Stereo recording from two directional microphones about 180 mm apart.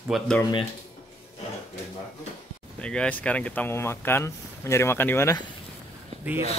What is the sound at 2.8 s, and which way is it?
Speech, 5° left (ahead or behind).